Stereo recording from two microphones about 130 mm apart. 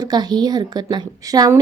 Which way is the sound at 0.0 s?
30° right (ahead or behind).